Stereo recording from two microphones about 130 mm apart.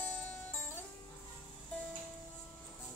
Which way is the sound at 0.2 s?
15° left (ahead or behind).